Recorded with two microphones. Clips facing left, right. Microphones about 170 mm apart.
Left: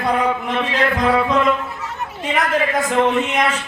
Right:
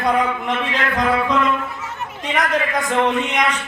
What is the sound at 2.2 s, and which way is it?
Speech, centre (ahead or behind).